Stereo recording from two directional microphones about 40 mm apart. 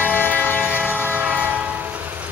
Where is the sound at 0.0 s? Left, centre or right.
Left.